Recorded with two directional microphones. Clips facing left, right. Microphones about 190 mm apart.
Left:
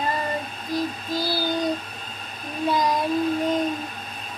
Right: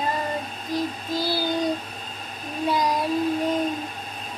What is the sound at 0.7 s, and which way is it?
Child singing, 15° right (ahead or behind).